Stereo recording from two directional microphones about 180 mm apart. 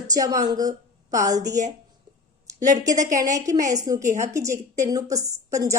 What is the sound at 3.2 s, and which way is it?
A woman's voice, 20° right (ahead or behind).